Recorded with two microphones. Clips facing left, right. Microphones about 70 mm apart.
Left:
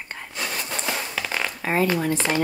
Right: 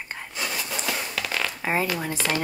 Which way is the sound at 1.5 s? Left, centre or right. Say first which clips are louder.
Left 4 dB; centre.